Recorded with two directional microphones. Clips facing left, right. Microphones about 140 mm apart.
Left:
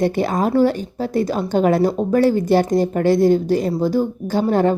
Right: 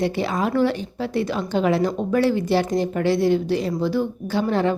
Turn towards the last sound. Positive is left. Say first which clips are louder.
# left 4 dB
turn(degrees=45)  # may be behind; listen again after turning